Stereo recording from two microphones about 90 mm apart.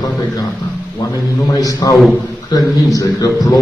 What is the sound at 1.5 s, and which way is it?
Speech, 45° left (ahead or behind).